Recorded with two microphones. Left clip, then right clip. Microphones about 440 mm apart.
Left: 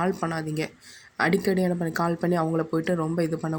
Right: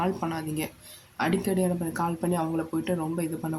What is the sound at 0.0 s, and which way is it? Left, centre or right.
Speech, right.